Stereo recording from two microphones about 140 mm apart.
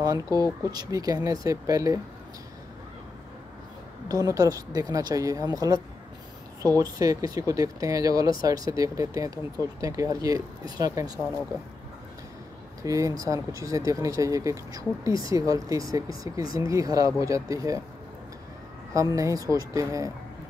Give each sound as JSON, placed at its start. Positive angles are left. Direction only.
{"t": 0.0, "sound": "speech", "side_deg": -25}
{"t": 4.1, "sound": "speech", "side_deg": -25}
{"t": 12.8, "sound": "speech", "side_deg": -25}
{"t": 18.9, "sound": "speech", "side_deg": -25}